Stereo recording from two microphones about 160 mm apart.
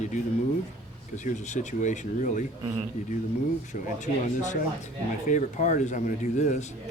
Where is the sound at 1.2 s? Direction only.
50° left (ahead or behind).